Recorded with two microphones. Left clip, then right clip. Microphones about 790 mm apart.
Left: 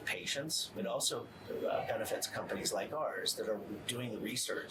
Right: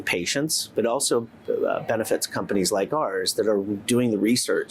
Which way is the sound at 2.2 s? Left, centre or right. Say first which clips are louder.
Right 13 dB; right.